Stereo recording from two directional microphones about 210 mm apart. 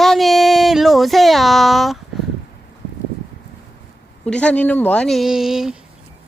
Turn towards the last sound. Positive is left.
turn(degrees=0)  # may be behind; listen again after turning